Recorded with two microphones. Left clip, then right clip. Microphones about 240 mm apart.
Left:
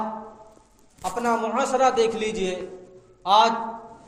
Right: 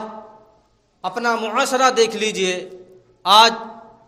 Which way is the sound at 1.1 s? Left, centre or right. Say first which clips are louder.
Right 4 dB; right.